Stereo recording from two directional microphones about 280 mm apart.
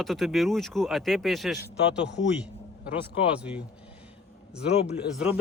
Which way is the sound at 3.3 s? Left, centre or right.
Centre.